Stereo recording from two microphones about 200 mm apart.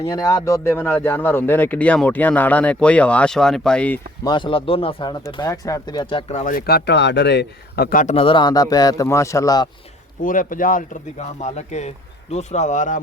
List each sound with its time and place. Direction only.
0.0 s speech: 20° left (ahead or behind)
4.3 s speech: 25° left (ahead or behind)
10.2 s speech: 45° left (ahead or behind)